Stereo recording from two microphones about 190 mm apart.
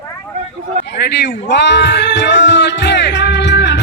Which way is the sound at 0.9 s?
60° left (ahead or behind).